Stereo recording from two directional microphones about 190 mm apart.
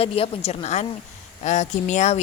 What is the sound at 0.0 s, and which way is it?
A woman's voice, 30° left (ahead or behind).